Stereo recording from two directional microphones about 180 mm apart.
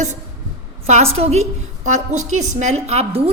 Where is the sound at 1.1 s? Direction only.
35° right (ahead or behind).